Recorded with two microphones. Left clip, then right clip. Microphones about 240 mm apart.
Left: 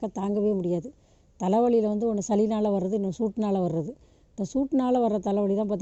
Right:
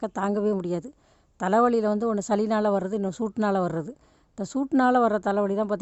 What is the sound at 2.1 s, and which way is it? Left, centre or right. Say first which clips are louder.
Speech: right 1 dB; right.